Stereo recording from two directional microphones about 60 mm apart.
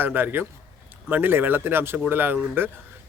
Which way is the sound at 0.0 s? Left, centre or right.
Right.